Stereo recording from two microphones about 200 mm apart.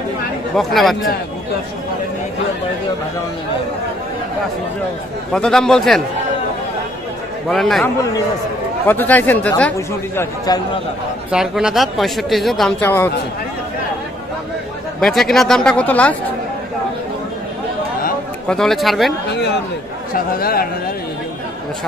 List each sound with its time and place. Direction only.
0.7 s speech: centre (ahead or behind)
5.3 s speech: 5° left (ahead or behind)
7.4 s speech: centre (ahead or behind)
11.2 s speech: 5° right (ahead or behind)
12.8 s speech: 10° left (ahead or behind)
15.0 s speech: centre (ahead or behind)
18.5 s speech: centre (ahead or behind)
20.3 s speech: 50° left (ahead or behind)